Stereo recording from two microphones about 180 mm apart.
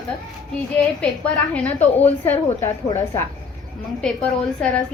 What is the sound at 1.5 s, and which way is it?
A woman's voice, 10° left (ahead or behind).